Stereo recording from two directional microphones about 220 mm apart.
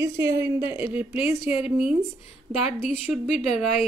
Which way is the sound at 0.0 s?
15° right (ahead or behind).